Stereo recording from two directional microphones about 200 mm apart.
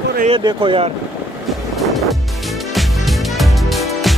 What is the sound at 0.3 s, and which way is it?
Speech, 20° right (ahead or behind).